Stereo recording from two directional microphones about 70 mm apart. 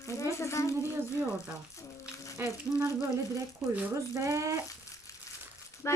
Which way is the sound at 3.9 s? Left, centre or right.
Right.